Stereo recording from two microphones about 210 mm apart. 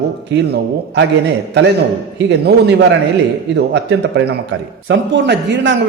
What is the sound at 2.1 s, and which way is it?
A man's voice, 55° right (ahead or behind).